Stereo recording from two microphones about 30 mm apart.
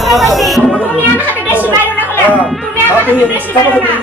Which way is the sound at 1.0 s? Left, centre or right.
Right.